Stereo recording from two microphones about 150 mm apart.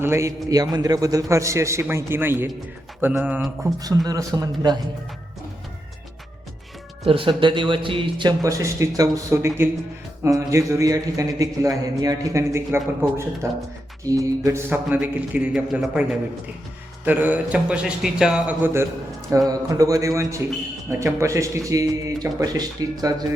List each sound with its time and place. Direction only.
0.0 s a man's voice: 20° right (ahead or behind)
3.8 s a man's voice: 25° right (ahead or behind)
7.0 s a man's voice: 35° right (ahead or behind)